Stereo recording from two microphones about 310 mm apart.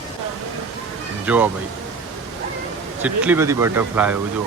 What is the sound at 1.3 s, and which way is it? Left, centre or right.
Speech, centre.